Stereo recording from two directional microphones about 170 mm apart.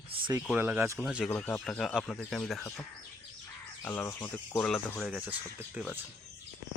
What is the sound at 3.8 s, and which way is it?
Speech, 15° left (ahead or behind).